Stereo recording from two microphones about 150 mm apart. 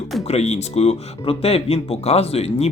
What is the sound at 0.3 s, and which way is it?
Speech, 45° left (ahead or behind).